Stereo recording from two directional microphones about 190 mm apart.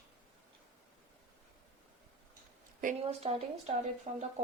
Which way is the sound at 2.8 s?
35° right (ahead or behind).